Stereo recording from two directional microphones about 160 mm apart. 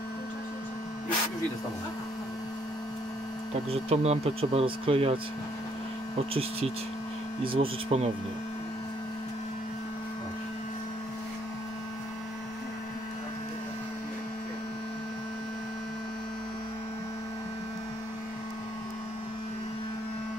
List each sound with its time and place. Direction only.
3.7 s speech: 40° right (ahead or behind)
7.4 s speech: 35° right (ahead or behind)